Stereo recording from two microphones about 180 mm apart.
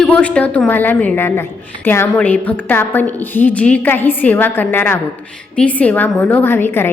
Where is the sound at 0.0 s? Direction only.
5° left (ahead or behind).